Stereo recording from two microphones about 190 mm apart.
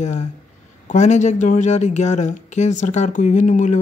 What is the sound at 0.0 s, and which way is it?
Speech, 35° left (ahead or behind).